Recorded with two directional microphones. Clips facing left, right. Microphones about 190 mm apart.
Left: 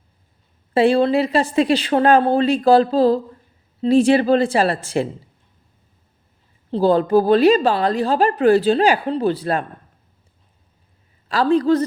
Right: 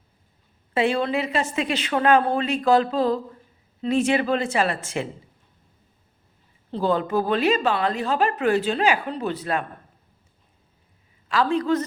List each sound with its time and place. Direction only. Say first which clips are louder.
0.7 s a woman's voice: left 7 dB; 35° left (ahead or behind)
6.7 s a woman's voice: left 7 dB; 35° left (ahead or behind)
11.3 s a woman's voice: left 6 dB; 35° left (ahead or behind)